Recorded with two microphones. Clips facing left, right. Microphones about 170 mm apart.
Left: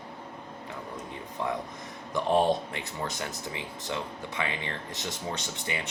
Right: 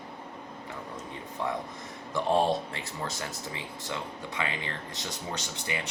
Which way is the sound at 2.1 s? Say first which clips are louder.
Left 1 dB; 20° left (ahead or behind).